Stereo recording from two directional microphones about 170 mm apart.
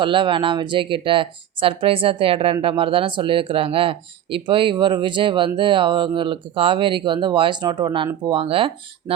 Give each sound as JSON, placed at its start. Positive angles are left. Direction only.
{"t": 0.0, "sound": "speech", "side_deg": -30}